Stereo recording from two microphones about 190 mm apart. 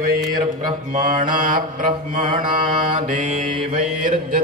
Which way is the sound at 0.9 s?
45° right (ahead or behind).